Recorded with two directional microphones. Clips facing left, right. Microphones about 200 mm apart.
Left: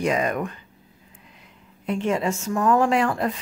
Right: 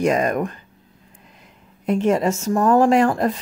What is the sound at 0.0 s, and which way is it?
Speech, 45° right (ahead or behind).